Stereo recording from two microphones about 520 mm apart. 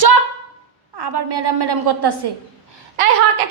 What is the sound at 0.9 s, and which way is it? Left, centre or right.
A woman's voice, right.